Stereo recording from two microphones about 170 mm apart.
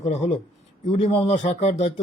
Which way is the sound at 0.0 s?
45° left (ahead or behind).